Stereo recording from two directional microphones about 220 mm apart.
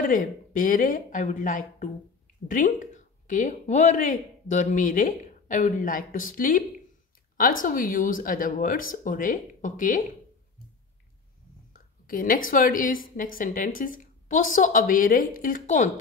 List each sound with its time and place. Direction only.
0.0 s speech: 40° left (ahead or behind)
7.6 s speech: 40° left (ahead or behind)
11.7 s a sound: 40° left (ahead or behind)
12.4 s speech: 40° left (ahead or behind)